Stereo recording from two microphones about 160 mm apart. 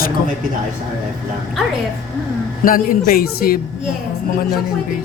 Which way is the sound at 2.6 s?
60° left (ahead or behind).